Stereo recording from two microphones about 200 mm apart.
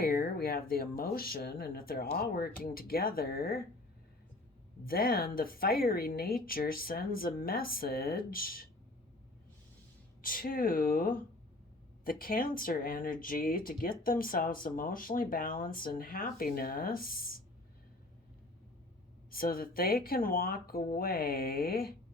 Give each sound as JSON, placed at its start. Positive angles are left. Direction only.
{"t": 0.0, "sound": "speech", "side_deg": 50}
{"t": 4.9, "sound": "speech", "side_deg": 45}
{"t": 10.2, "sound": "speech", "side_deg": 45}
{"t": 19.3, "sound": "speech", "side_deg": 45}